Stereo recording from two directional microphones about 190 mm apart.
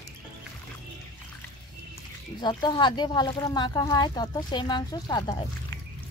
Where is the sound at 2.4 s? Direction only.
25° left (ahead or behind).